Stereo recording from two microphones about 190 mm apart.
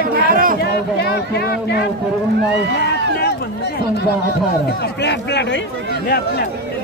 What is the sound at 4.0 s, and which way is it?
Speech, 60° left (ahead or behind).